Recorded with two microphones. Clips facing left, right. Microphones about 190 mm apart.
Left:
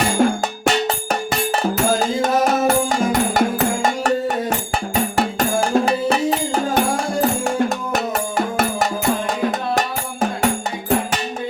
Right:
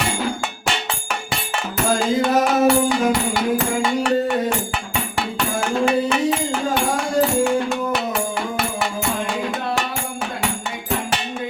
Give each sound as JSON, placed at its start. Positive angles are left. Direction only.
{"t": 0.0, "sound": "music", "side_deg": 45}